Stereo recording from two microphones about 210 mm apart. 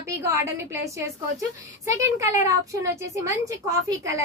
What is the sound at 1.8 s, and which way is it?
A woman's voice, 15° right (ahead or behind).